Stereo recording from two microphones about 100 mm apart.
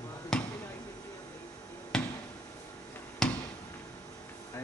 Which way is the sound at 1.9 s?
5° left (ahead or behind).